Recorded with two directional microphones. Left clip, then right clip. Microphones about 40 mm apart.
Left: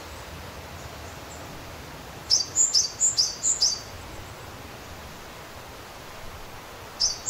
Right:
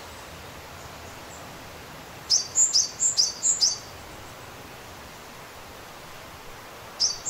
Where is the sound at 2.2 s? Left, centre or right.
Right.